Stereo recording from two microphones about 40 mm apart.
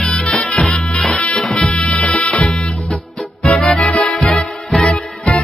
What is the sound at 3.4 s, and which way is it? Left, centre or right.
Music, centre.